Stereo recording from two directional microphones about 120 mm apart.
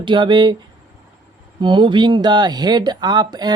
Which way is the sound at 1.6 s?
40° right (ahead or behind).